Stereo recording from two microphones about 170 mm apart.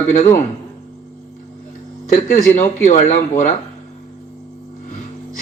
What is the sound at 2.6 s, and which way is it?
Speech, 40° left (ahead or behind).